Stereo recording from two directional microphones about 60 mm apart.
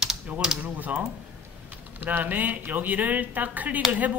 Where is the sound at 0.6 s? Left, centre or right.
Right.